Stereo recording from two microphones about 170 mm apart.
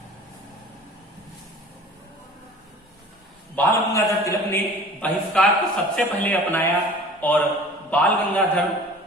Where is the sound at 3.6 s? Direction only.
15° left (ahead or behind).